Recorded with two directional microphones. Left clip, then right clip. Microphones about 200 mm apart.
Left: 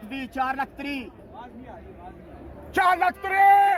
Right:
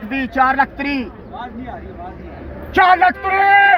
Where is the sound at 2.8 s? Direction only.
65° left (ahead or behind).